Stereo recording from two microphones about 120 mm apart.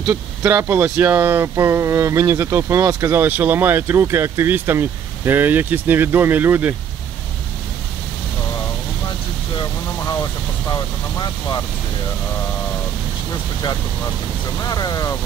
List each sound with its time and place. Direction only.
0.5 s speech: 20° right (ahead or behind)
10.7 s speech: 35° left (ahead or behind)
14.6 s speech: 30° left (ahead or behind)